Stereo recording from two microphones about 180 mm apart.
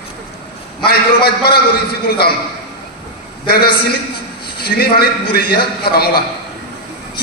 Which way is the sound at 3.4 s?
60° left (ahead or behind).